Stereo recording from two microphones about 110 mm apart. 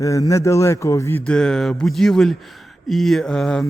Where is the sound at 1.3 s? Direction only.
5° left (ahead or behind).